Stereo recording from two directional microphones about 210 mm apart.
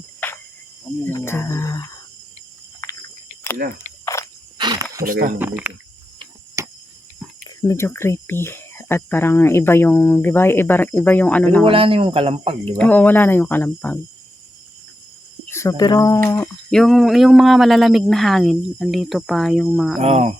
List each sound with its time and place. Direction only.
1.0 s speech: 10° left (ahead or behind)
2.8 s a sound: 15° left (ahead or behind)
4.0 s a sound: 15° left (ahead or behind)
4.5 s a sound: 20° right (ahead or behind)
5.0 s speech: 40° right (ahead or behind)
5.4 s speech: 10° right (ahead or behind)
6.6 s cricket: 15° right (ahead or behind)
7.3 s speech: 10° left (ahead or behind)
11.6 s speech: 25° right (ahead or behind)
12.6 s speech: 5° left (ahead or behind)
15.4 s speech: 15° left (ahead or behind)
20.0 s speech: 30° right (ahead or behind)